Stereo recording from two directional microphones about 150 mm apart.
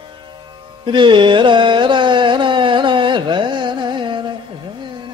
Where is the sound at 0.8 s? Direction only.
30° right (ahead or behind).